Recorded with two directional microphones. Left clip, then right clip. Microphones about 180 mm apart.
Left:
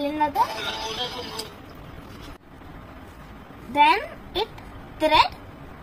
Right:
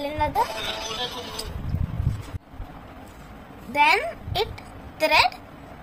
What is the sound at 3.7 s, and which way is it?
A woman's voice, 60° right (ahead or behind).